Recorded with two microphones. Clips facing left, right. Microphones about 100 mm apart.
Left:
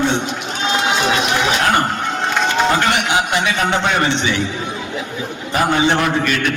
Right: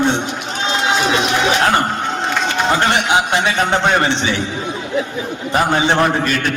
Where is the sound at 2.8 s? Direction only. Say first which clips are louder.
Right 2 dB; 30° right (ahead or behind).